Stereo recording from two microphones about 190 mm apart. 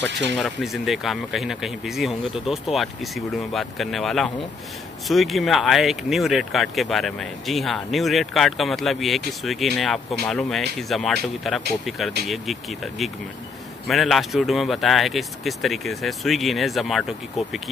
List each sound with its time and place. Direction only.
0.0 s speech: 65° right (ahead or behind)
0.3 s speech: centre (ahead or behind)